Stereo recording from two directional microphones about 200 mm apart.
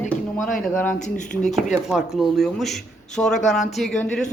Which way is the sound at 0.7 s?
10° left (ahead or behind).